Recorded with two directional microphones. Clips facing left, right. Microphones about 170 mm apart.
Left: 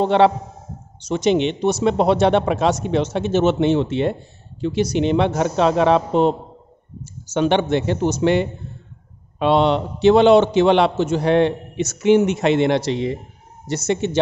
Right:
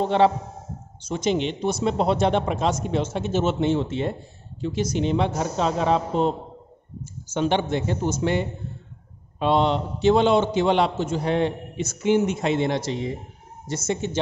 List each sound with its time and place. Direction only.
0.0 s speech: 75° left (ahead or behind)